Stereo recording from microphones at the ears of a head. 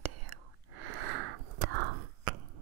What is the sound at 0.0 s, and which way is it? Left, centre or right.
Whispering, right.